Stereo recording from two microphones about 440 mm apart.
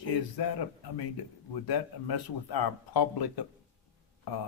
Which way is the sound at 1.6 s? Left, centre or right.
Left.